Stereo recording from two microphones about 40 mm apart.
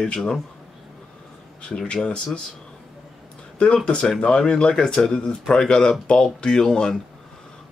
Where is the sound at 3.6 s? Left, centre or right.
Left.